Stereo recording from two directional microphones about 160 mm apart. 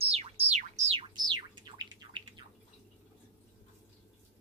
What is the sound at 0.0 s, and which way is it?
Music, 40° right (ahead or behind).